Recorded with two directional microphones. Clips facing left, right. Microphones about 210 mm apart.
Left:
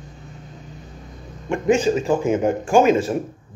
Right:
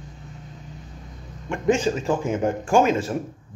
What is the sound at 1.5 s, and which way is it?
Speech, 10° left (ahead or behind).